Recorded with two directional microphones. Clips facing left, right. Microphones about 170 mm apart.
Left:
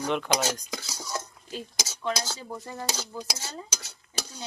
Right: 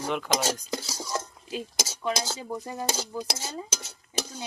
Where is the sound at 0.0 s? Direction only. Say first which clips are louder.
Left 2 dB; 5° right (ahead or behind).